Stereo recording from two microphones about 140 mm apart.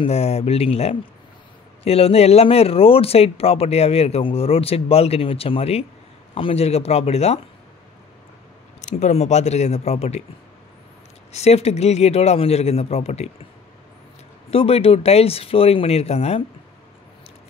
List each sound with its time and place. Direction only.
0.0 s speech: 50° left (ahead or behind)
8.8 s speech: 55° left (ahead or behind)
11.3 s speech: 50° left (ahead or behind)
14.5 s speech: 45° left (ahead or behind)